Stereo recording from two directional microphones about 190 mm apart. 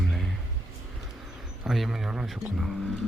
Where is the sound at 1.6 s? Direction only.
Centre (ahead or behind).